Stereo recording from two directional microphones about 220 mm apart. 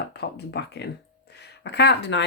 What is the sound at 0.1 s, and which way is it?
Speech, 50° left (ahead or behind).